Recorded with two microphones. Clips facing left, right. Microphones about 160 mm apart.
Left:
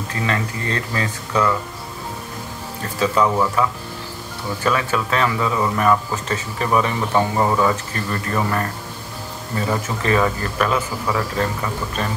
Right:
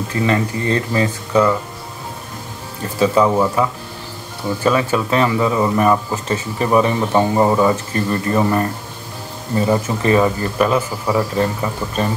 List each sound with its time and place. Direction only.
0.3 s speech: 20° right (ahead or behind)
3.0 s speech: 25° right (ahead or behind)
4.6 s speech: 30° right (ahead or behind)